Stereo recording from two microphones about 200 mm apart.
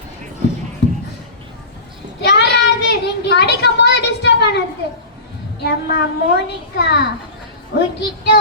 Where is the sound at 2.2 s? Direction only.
55° left (ahead or behind).